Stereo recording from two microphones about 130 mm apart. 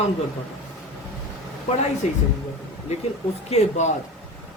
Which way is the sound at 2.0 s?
60° left (ahead or behind).